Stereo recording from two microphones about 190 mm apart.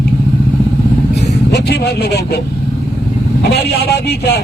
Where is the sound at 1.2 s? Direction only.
60° left (ahead or behind).